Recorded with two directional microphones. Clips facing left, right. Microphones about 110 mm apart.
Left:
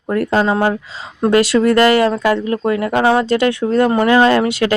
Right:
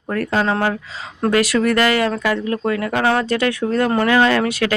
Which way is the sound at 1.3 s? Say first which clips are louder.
Left 5 dB; 30° left (ahead or behind).